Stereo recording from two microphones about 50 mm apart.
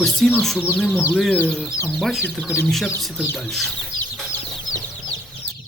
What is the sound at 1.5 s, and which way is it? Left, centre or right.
Speech, centre.